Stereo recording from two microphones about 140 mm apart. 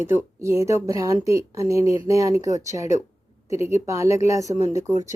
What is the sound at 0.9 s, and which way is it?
A woman's voice, 25° right (ahead or behind).